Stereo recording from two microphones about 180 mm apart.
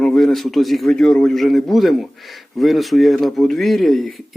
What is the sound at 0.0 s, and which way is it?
A man's voice, centre (ahead or behind).